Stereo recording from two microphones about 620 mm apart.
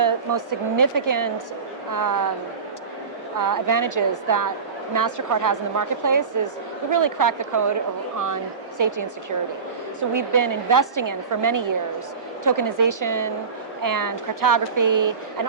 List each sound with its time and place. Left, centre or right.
0.0 s a woman's voice: right
3.3 s a woman's voice: right
8.8 s a woman's voice: right
10.0 s a woman's voice: right